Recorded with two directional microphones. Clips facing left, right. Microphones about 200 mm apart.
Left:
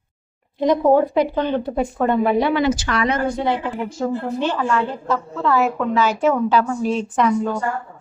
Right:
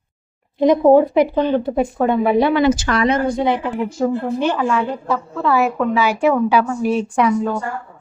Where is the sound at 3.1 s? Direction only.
15° right (ahead or behind).